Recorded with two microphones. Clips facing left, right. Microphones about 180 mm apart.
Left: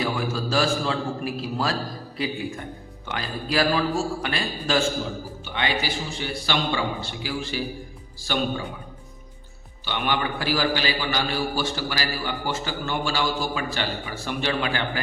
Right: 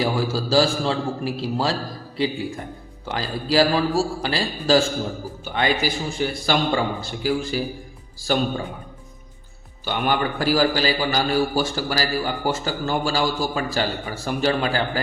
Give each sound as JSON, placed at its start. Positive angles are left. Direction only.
{"t": 0.0, "sound": "a man's voice", "side_deg": -30}
{"t": 5.5, "sound": "a man's voice", "side_deg": -45}
{"t": 9.8, "sound": "a man's voice", "side_deg": -45}